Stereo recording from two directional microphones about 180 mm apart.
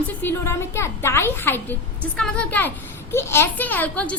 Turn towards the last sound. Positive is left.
turn(degrees=10)  # may be behind; listen again after turning